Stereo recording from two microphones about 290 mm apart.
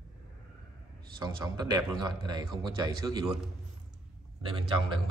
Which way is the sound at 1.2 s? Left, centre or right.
Centre.